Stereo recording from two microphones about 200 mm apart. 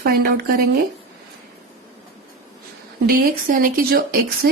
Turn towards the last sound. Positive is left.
turn(degrees=-50)  # may be behind; listen again after turning